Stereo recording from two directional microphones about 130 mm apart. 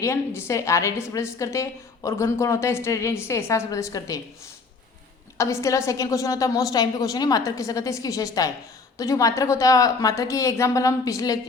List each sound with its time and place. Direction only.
0.0 s a woman's voice: 20° left (ahead or behind)
5.4 s a woman's voice: 25° left (ahead or behind)